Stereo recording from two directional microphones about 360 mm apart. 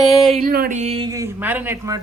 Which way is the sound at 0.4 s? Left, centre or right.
Right.